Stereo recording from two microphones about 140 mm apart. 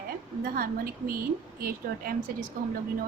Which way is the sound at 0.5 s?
90° right.